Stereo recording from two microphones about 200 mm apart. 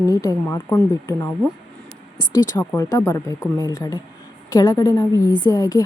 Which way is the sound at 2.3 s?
15° left (ahead or behind).